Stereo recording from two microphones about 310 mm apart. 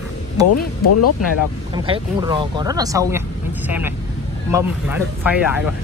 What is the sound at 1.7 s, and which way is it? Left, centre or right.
Speech, centre.